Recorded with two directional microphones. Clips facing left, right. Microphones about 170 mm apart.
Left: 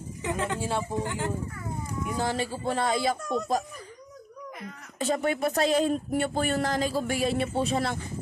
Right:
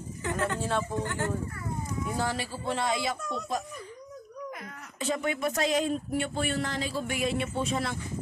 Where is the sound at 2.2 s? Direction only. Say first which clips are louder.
Left 3 dB; 40° left (ahead or behind).